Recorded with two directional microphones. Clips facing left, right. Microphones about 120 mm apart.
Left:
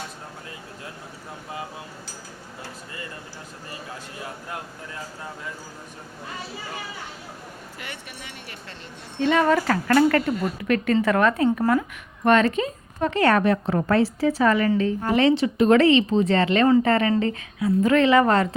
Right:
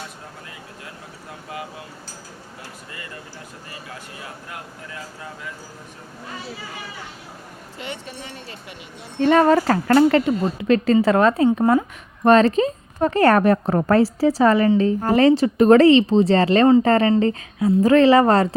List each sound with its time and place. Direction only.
7.8 s speech: 25° right (ahead or behind)
9.2 s speech: 40° right (ahead or behind)